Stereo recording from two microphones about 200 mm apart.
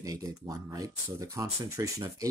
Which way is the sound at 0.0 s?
15° right (ahead or behind).